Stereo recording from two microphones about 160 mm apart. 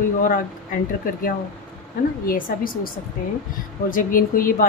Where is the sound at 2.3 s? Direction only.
60° left (ahead or behind).